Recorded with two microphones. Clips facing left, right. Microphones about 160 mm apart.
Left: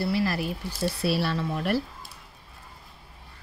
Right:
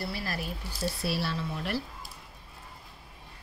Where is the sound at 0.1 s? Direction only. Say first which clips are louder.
Left 10 dB; 75° left (ahead or behind).